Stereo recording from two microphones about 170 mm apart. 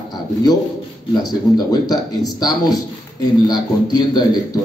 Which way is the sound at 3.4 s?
25° left (ahead or behind).